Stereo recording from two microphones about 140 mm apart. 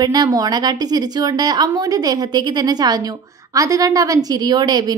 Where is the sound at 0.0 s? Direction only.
30° right (ahead or behind).